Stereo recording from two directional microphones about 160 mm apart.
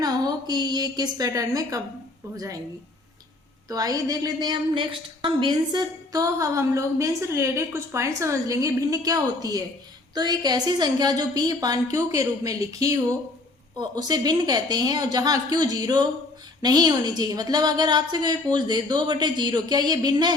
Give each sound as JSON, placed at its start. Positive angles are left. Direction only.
{"t": 0.0, "sound": "a woman's voice", "side_deg": -25}
{"t": 3.7, "sound": "a woman's voice", "side_deg": -25}